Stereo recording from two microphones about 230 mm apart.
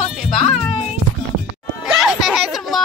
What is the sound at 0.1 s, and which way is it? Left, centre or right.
Music, centre.